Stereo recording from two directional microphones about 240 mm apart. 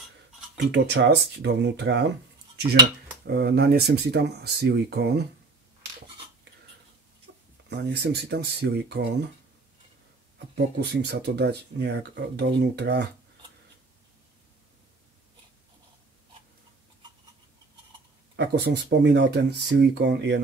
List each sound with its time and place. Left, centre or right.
0.7 s speech: right
3.3 s speech: right
7.3 s a sound: right
7.7 s speech: right
10.5 s speech: right
18.3 s speech: right